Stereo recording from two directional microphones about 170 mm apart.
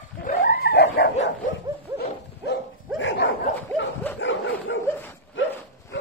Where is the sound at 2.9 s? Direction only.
90° left.